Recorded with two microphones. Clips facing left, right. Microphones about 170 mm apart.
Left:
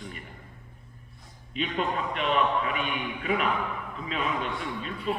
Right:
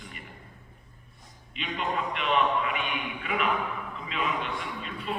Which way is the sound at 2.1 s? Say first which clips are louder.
Left 1 dB; 40° left (ahead or behind).